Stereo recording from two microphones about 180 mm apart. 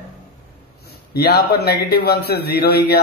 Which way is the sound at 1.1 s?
65° left (ahead or behind).